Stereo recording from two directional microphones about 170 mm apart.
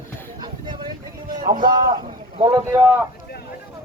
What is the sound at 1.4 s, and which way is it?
Speech, 55° right (ahead or behind).